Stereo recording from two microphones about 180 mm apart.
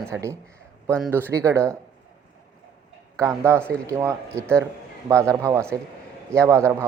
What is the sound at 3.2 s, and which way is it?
Speech, 15° right (ahead or behind).